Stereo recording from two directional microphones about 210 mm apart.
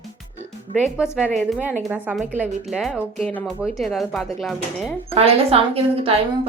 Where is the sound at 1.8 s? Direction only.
5° right (ahead or behind).